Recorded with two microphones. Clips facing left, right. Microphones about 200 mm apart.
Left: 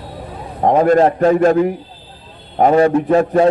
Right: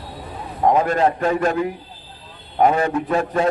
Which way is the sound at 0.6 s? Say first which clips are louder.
Left 5 dB; 35° left (ahead or behind).